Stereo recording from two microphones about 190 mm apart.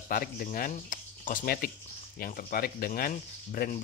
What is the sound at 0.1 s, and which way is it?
Speech, 50° left (ahead or behind).